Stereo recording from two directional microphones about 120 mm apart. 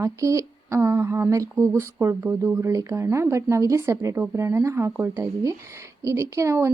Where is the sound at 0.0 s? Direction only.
25° right (ahead or behind).